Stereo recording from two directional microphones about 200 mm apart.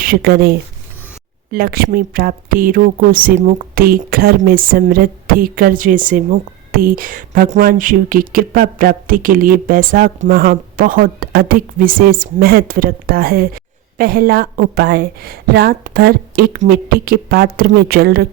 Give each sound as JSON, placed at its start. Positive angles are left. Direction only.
{"t": 0.0, "sound": "speech", "side_deg": -50}